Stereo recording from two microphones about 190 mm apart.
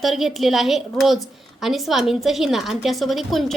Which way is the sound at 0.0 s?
Centre (ahead or behind).